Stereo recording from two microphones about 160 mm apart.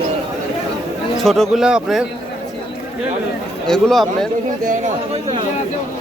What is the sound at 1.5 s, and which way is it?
Speech, 5° right (ahead or behind).